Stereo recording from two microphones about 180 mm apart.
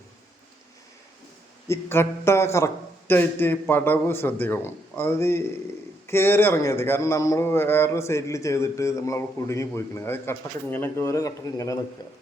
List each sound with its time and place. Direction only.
1.6 s a man's voice: 15° left (ahead or behind)